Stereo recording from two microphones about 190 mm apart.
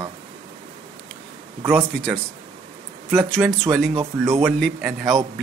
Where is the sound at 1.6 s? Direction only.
10° right (ahead or behind).